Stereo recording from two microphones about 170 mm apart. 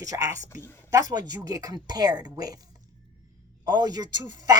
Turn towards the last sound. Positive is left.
turn(degrees=-20)  # may be behind; listen again after turning